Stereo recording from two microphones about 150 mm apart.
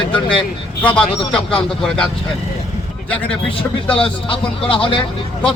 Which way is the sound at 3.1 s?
10° left (ahead or behind).